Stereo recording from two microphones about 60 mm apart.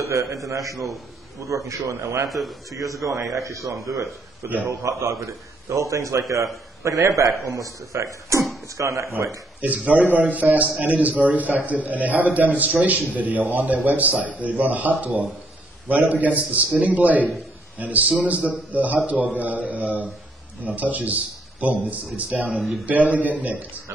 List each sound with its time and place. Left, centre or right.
0.0 s a man's voice: right
2.2 s speech: centre
2.7 s a man's voice: right
9.6 s a man's voice: right
22.5 s speech: centre
22.8 s a man's voice: right